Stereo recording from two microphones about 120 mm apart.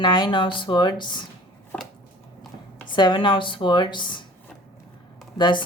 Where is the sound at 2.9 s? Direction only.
40° left (ahead or behind).